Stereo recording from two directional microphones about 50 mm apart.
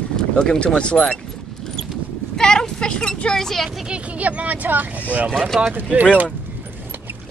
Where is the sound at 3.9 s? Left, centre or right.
Right.